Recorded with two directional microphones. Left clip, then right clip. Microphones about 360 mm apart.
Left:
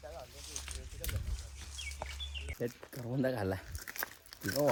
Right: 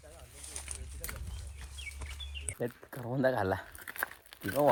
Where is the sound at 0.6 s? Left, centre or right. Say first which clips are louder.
Left 2 dB; centre.